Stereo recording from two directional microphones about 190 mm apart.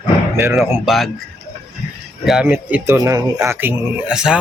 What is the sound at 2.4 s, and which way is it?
Speech, 10° right (ahead or behind).